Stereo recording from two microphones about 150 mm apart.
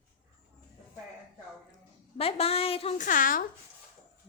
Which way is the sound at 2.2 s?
40° left (ahead or behind).